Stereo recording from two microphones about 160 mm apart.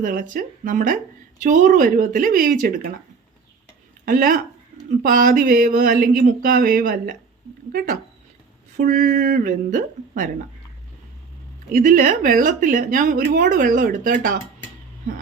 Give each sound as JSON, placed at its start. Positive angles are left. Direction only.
{"t": 0.0, "sound": "speech", "side_deg": -60}
{"t": 4.0, "sound": "speech", "side_deg": -60}
{"t": 8.7, "sound": "speech", "side_deg": -55}
{"t": 11.7, "sound": "speech", "side_deg": -55}